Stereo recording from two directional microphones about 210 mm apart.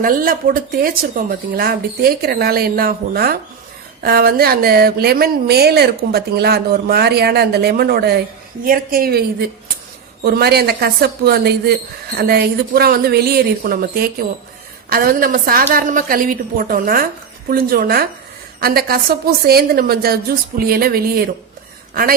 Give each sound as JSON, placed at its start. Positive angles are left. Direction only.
{"t": 0.0, "sound": "a woman's voice", "side_deg": -40}